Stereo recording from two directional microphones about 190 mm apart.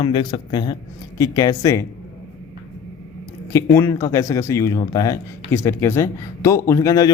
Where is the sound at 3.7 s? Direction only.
15° left (ahead or behind).